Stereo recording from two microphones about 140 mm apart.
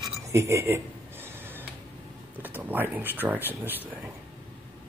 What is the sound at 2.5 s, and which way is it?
Speech, 15° right (ahead or behind).